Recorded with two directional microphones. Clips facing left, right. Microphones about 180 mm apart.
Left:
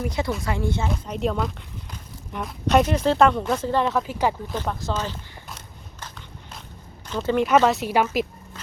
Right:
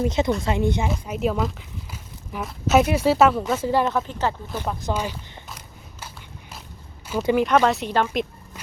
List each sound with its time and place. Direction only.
0.0 s a woman's voice: 25° right (ahead or behind)
0.9 s speech: 5° right (ahead or behind)
4.4 s speech: 10° right (ahead or behind)
7.1 s speech: 10° right (ahead or behind)
7.4 s speech: 5° left (ahead or behind)